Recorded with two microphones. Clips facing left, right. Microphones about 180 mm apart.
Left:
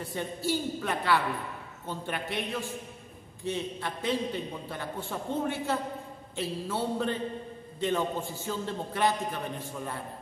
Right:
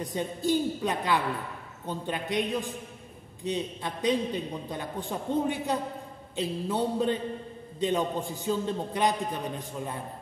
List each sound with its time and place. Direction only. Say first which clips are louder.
0.0 s a man's voice: right 3 dB; 15° right (ahead or behind)